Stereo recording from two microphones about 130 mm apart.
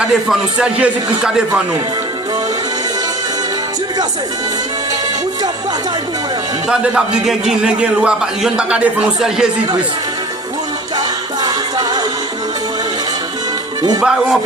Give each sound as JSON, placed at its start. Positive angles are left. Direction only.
{"t": 0.0, "sound": "a man's voice", "side_deg": -5}
{"t": 6.7, "sound": "a man's voice", "side_deg": -5}
{"t": 11.4, "sound": "music", "side_deg": -30}
{"t": 14.0, "sound": "speech", "side_deg": -5}